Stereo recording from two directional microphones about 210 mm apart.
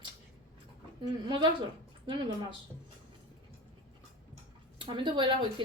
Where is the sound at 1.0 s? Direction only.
25° right (ahead or behind).